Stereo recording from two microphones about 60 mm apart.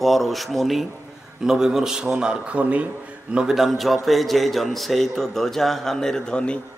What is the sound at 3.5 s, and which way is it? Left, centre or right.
A man's voice, centre.